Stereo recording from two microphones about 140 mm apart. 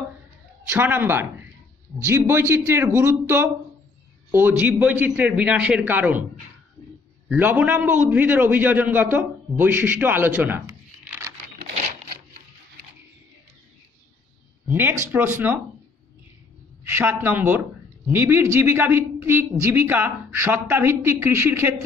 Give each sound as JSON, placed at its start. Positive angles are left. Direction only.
{"t": 0.7, "sound": "speech", "side_deg": -15}
{"t": 7.2, "sound": "speech", "side_deg": -10}
{"t": 11.1, "sound": "a sound", "side_deg": -20}
{"t": 14.7, "sound": "speech", "side_deg": -15}
{"t": 16.8, "sound": "speech", "side_deg": -15}